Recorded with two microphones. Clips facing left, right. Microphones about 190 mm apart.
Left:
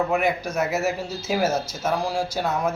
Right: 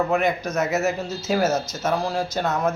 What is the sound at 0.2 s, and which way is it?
Speech, 10° left (ahead or behind).